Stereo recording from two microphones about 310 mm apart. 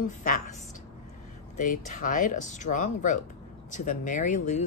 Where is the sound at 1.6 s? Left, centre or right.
Left.